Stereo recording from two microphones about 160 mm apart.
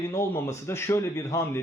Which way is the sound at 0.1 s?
15° left (ahead or behind).